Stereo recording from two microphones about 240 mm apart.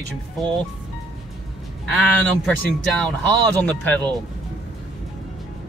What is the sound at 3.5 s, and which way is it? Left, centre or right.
Speech, centre.